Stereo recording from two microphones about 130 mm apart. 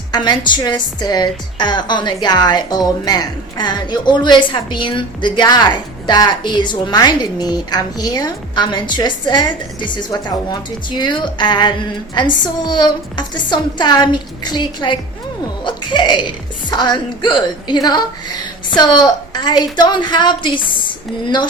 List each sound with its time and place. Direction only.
0.1 s a woman's voice: 35° left (ahead or behind)